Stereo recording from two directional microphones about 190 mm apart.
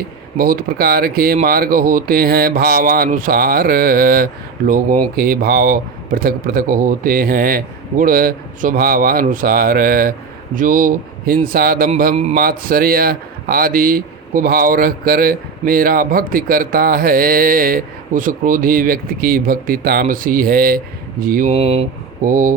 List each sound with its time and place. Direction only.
0.3 s a man's voice: 50° right (ahead or behind)
21.5 s speech: 30° right (ahead or behind)
22.2 s a man's voice: 45° right (ahead or behind)